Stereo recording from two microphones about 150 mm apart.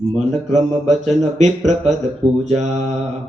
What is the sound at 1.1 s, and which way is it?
Mantra, 50° right (ahead or behind).